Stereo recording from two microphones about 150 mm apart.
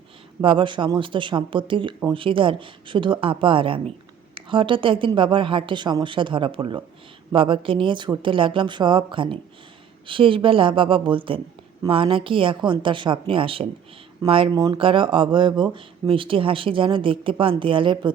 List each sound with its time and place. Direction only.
0.4 s speech: 35° right (ahead or behind)